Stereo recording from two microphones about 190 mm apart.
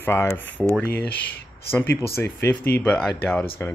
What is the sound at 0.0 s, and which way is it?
Speech, 10° left (ahead or behind).